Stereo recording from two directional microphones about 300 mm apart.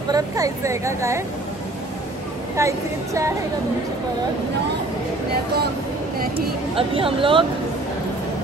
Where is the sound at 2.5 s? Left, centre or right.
Centre.